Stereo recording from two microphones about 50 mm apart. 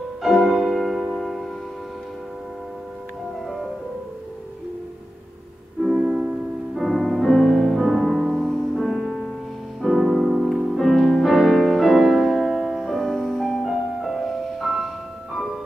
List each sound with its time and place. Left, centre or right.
0.2 s music: centre
5.9 s music: right
6.7 s music: centre